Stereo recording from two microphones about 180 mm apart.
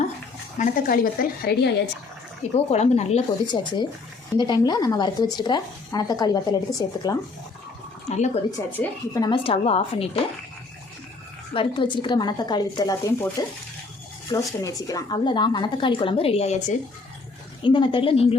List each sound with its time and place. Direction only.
0.6 s a woman's voice: 50° left (ahead or behind)
2.6 s a woman's voice: 35° left (ahead or behind); by 7.2 s 20° left (ahead or behind)
8.1 s a woman's voice: 35° left (ahead or behind)
8.5 s a woman's voice: 20° left (ahead or behind)
11.5 s speech: 30° left (ahead or behind)
17.6 s speech: 25° left (ahead or behind)